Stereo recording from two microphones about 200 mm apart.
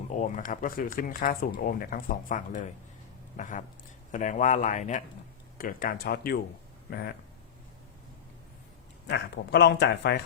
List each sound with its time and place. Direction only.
0.1 s speech: 40° left (ahead or behind)
9.0 s speech: 55° left (ahead or behind)